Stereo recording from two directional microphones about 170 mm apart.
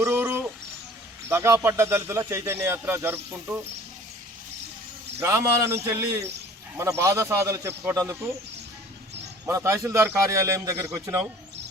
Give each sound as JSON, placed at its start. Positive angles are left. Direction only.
{"t": 0.0, "sound": "bird", "side_deg": -15}
{"t": 1.3, "sound": "speech", "side_deg": -15}
{"t": 5.2, "sound": "speech", "side_deg": -15}
{"t": 9.5, "sound": "speech", "side_deg": -15}